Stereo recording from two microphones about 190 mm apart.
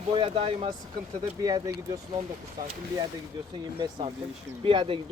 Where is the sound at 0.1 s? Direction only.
25° right (ahead or behind).